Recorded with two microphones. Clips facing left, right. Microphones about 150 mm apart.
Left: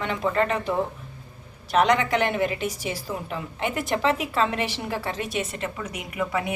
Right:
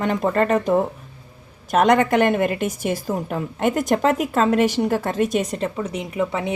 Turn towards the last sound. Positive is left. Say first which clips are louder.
# right 4 dB
turn(degrees=-25)  # may be behind; listen again after turning